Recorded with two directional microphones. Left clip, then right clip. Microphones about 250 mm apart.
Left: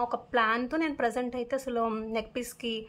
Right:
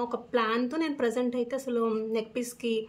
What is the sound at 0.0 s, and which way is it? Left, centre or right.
Speech, centre.